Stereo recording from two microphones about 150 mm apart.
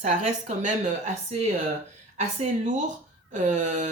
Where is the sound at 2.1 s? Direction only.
50° right (ahead or behind).